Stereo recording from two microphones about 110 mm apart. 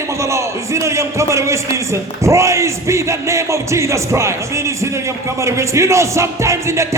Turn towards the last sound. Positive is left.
turn(degrees=-25)  # may be behind; listen again after turning